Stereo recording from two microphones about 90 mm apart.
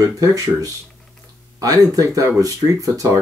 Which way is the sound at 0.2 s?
40° right (ahead or behind).